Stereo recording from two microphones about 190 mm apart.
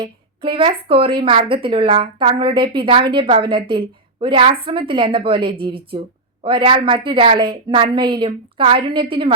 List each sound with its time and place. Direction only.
0.0 s a woman's voice: 25° right (ahead or behind)